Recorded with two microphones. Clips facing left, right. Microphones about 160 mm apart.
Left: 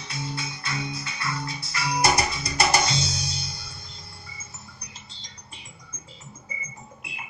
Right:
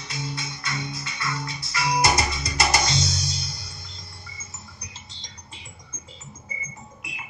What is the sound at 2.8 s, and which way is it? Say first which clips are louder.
Music: right 1 dB; 30° left (ahead or behind).